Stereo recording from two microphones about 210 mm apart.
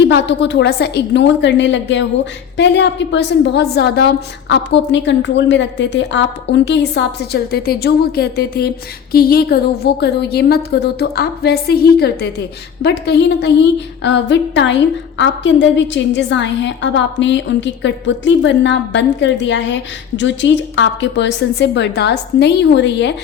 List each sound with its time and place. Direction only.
0.1 s a woman's voice: 55° left (ahead or behind)